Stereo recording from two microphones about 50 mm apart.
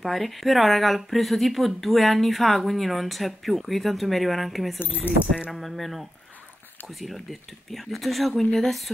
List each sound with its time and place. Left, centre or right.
0.0 s a woman's voice: centre
5.1 s speech: left
5.5 s a woman's voice: centre